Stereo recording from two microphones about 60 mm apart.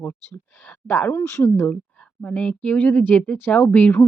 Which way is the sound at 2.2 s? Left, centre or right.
Left.